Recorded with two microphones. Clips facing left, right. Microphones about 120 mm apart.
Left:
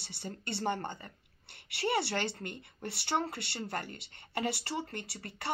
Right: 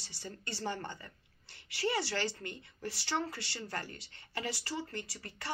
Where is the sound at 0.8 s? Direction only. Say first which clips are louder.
Left 3 dB; 25° left (ahead or behind).